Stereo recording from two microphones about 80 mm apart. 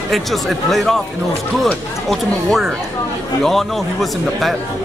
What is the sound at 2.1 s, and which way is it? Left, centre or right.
Speech, centre.